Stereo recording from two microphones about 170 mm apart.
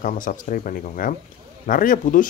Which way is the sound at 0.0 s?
50° left (ahead or behind).